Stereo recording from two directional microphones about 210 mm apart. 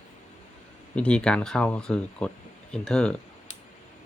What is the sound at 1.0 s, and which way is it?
Speech, 5° left (ahead or behind).